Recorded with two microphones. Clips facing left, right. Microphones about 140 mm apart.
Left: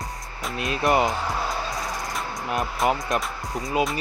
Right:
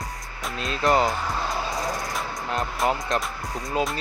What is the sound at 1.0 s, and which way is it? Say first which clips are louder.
Music: even; centre (ahead or behind).